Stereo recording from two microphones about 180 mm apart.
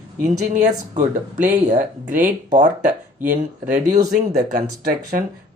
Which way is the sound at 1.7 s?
45° right (ahead or behind).